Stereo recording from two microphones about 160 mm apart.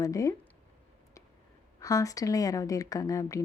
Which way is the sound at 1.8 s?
20° left (ahead or behind).